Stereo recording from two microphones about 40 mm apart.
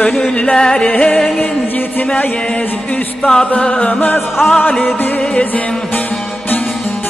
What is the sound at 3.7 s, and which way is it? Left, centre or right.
Music, left.